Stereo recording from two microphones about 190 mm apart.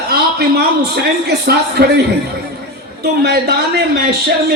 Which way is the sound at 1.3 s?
55° right (ahead or behind).